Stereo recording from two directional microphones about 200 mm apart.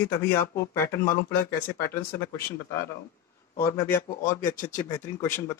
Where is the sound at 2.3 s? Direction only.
15° left (ahead or behind).